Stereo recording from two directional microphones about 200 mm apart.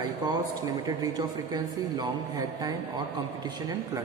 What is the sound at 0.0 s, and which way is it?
Speech, 20° right (ahead or behind).